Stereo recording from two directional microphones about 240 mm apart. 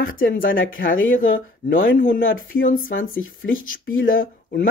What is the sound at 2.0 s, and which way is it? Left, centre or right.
Speech, left.